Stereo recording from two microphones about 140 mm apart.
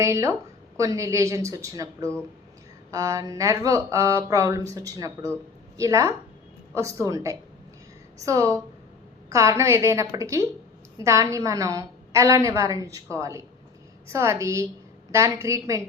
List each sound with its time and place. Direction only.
0.0 s a woman's voice: 20° right (ahead or behind)